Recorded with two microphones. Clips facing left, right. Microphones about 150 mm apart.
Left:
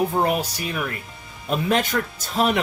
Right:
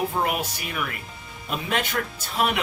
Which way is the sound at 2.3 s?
40° left (ahead or behind).